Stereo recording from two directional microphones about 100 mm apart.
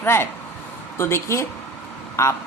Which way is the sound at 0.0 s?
20° left (ahead or behind).